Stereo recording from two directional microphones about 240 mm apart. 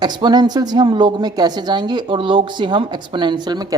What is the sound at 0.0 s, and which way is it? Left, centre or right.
Speech, centre.